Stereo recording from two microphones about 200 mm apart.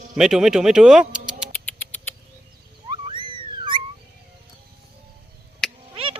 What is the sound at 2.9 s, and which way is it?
Cat, 25° right (ahead or behind).